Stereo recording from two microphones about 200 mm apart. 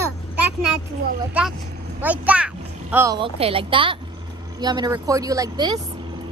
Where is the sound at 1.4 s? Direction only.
5° right (ahead or behind).